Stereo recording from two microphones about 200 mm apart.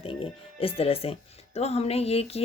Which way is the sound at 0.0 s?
30° left (ahead or behind).